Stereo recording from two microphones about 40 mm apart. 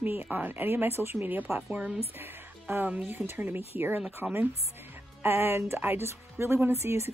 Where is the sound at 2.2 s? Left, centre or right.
Right.